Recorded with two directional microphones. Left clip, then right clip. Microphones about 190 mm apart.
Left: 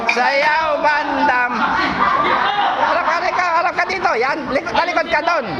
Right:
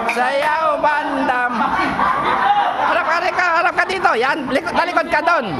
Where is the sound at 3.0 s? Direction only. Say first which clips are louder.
Even; 45° right (ahead or behind).